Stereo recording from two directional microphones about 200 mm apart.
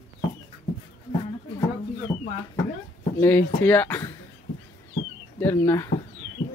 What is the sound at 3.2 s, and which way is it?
Speech, 10° left (ahead or behind).